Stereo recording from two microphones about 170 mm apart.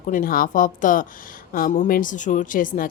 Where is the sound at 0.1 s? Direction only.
55° left (ahead or behind).